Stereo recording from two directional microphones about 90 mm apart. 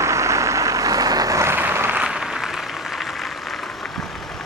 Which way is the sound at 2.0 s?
10° right (ahead or behind).